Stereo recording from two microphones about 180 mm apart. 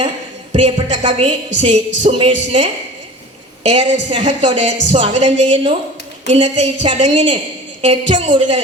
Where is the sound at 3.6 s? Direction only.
30° right (ahead or behind).